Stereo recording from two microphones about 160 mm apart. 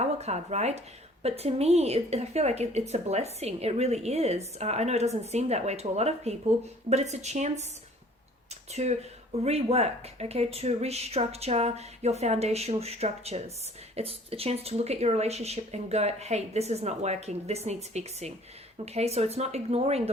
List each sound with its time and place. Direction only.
0.0 s a woman's voice: 45° right (ahead or behind)
8.7 s a woman's voice: 45° right (ahead or behind)